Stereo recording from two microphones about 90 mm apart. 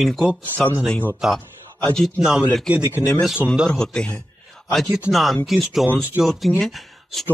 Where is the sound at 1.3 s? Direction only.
5° left (ahead or behind).